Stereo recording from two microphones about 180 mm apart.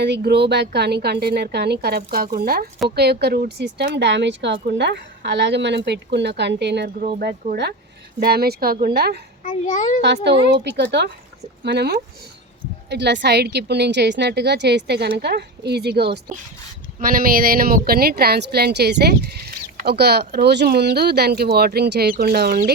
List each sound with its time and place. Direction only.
0.0 s speech: 70° right (ahead or behind)
7.0 s speech: 60° right (ahead or behind)
9.4 s a child's voice: 45° left (ahead or behind)
10.0 s speech: 70° right (ahead or behind)
17.0 s speech: 55° right (ahead or behind)